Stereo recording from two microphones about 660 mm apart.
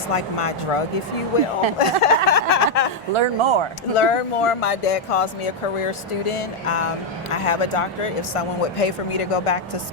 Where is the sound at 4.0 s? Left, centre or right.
Left.